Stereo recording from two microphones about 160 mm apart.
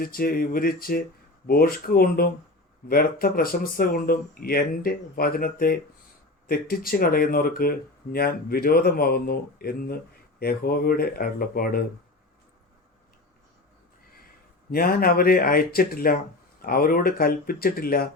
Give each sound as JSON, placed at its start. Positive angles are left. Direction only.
{"t": 0.0, "sound": "speech", "side_deg": 70}
{"t": 14.7, "sound": "speech", "side_deg": 70}